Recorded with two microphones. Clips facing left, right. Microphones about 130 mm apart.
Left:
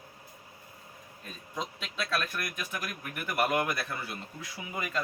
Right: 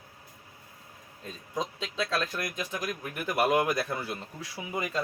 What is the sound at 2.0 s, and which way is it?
Speech, 25° right (ahead or behind).